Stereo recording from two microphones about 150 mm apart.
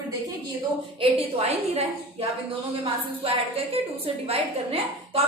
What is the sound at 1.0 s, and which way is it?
Speech, 35° right (ahead or behind).